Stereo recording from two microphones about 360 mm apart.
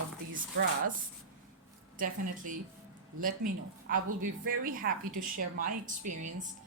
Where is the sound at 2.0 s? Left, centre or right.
Right.